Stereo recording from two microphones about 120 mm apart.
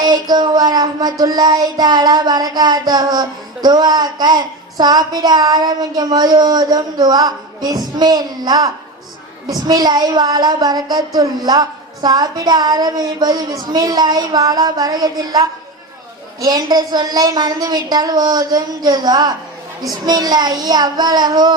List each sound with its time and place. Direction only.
0.0 s child singing: 35° right (ahead or behind)